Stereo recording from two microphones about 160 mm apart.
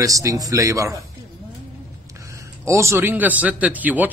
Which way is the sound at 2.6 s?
20° right (ahead or behind).